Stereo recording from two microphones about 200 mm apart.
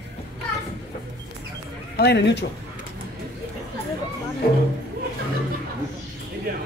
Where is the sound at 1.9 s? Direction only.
55° left (ahead or behind).